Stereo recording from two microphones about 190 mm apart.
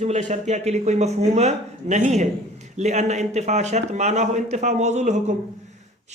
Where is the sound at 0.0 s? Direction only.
40° right (ahead or behind).